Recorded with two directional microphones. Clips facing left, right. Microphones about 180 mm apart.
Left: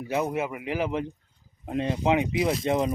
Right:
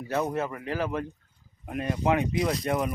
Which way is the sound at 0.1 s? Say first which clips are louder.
Left 1 dB; 10° left (ahead or behind).